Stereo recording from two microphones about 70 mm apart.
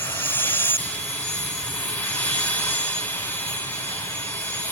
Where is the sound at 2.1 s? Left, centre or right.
Left.